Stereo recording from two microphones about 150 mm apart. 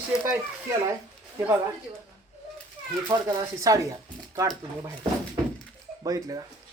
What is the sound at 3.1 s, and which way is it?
Speech, 20° right (ahead or behind).